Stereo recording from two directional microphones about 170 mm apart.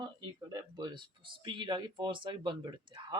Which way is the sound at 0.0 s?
25° right (ahead or behind).